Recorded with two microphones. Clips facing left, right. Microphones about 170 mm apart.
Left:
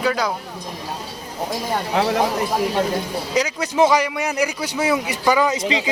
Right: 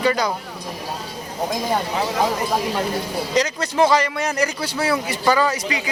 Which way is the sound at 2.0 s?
70° left (ahead or behind).